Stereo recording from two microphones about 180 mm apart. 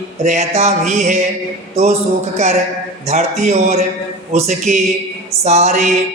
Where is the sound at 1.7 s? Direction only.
35° right (ahead or behind).